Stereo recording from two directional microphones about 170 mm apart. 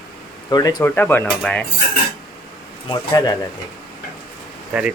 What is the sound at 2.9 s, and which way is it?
Speech, 20° left (ahead or behind).